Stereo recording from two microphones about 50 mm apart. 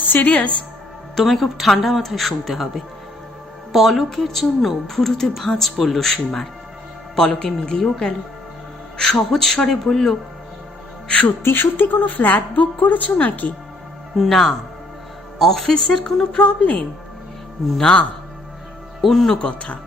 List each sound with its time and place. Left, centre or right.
0.1 s a woman's voice: left
1.1 s speech: centre
3.7 s a man's voice: centre
7.3 s a man's voice: centre
11.4 s a woman's voice: left
14.2 s a man's voice: centre
16.4 s a woman's voice: left
17.7 s speech: centre
19.0 s a man's voice: centre
19.4 s speech: left